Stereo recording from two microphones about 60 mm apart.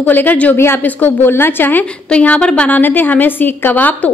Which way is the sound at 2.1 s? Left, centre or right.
Centre.